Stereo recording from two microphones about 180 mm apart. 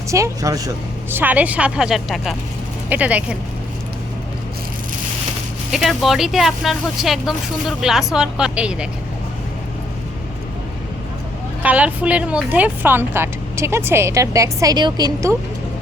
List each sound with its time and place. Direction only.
0.1 s speech: 20° right (ahead or behind)
5.7 s speech: centre (ahead or behind)
11.6 s speech: 10° right (ahead or behind)